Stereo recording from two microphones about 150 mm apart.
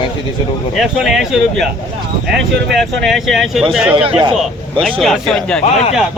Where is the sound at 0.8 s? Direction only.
Centre (ahead or behind).